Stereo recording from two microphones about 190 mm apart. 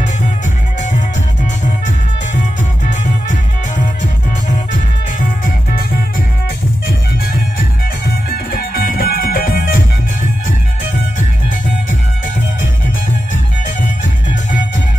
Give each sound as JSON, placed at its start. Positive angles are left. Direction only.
{"t": 2.9, "sound": "music", "side_deg": 40}
{"t": 8.3, "sound": "music", "side_deg": 50}